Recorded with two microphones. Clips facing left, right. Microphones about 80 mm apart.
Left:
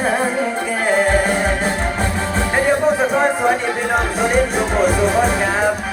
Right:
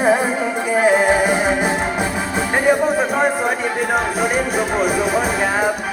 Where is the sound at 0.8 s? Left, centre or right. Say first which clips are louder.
Right 2 dB; centre.